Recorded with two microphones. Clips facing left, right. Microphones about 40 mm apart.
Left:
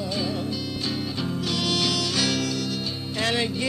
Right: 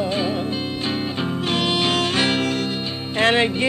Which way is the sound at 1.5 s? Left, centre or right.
Right.